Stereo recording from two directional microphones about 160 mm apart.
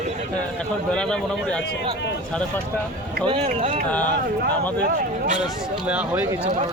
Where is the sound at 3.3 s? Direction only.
40° right (ahead or behind).